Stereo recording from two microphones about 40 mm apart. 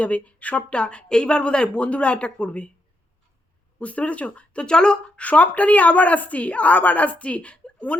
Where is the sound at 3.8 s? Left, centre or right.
Left.